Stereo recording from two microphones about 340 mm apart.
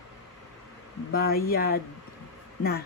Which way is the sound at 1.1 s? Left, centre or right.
Left.